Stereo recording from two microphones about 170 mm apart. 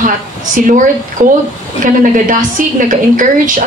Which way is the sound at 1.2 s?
50° right (ahead or behind).